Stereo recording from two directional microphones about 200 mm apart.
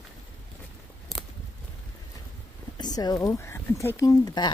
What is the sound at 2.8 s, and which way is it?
Speech, 20° left (ahead or behind).